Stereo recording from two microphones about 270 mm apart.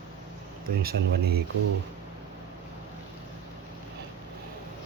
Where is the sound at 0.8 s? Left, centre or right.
Right.